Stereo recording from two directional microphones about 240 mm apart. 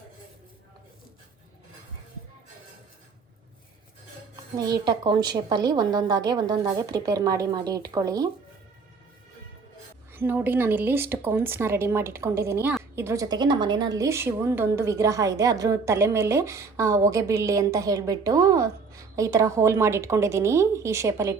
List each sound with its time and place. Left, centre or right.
4.5 s a woman's voice: centre
10.1 s a woman's voice: centre